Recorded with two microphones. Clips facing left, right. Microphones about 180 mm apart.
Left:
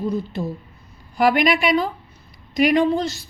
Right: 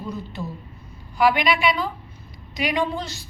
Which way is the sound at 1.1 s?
45° left (ahead or behind).